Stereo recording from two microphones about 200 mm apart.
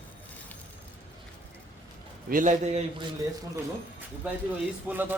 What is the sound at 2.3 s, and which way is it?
Speech, 40° right (ahead or behind).